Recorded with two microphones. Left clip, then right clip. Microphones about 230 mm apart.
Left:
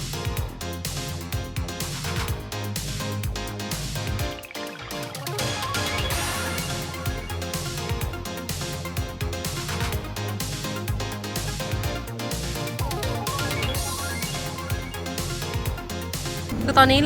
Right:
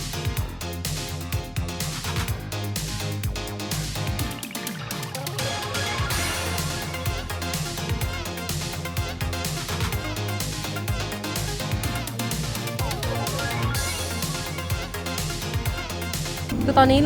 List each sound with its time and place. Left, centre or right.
5.4 s music: centre
16.6 s speech: centre